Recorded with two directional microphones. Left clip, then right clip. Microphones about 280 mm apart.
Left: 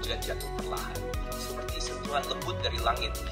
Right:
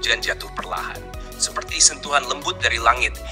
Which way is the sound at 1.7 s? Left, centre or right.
Right.